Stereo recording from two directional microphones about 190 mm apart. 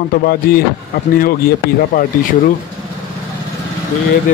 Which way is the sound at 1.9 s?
50° left (ahead or behind).